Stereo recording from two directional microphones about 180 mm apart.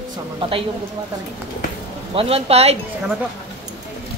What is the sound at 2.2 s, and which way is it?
Speech, 35° right (ahead or behind).